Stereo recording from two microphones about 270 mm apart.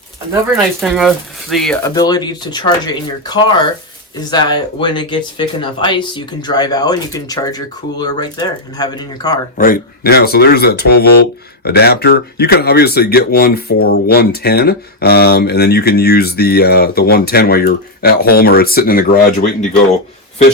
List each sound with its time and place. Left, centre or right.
0.5 s speech: centre
1.8 s speech: centre
9.6 s speech: left